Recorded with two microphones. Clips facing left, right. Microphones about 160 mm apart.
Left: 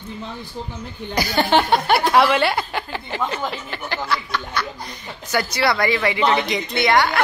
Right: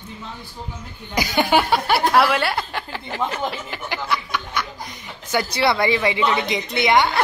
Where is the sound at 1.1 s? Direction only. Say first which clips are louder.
Even; 15° right (ahead or behind).